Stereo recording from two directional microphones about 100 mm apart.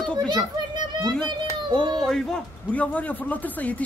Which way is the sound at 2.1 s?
5° left (ahead or behind).